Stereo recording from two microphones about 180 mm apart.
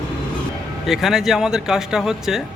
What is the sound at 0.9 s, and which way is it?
Speech, centre (ahead or behind).